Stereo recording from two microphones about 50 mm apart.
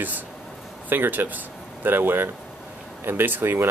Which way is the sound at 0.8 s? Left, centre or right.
Right.